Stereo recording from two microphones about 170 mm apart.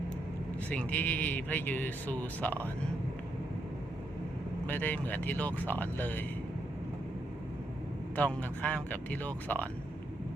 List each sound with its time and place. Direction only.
0.7 s speech: 10° left (ahead or behind)
4.6 s speech: 10° left (ahead or behind)
8.1 s speech: 10° left (ahead or behind)